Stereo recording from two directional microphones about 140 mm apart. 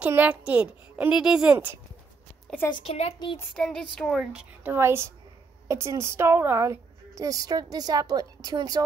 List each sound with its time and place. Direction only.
0.0 s a child's voice: 10° right (ahead or behind)
2.7 s a woman's voice: 45° left (ahead or behind)
3.5 s speech: 5° left (ahead or behind)
4.7 s a woman's voice: 20° right (ahead or behind)